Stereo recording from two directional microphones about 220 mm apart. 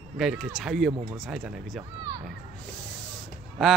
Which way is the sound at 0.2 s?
Centre (ahead or behind).